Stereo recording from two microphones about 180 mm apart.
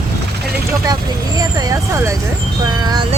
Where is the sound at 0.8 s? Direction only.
20° right (ahead or behind).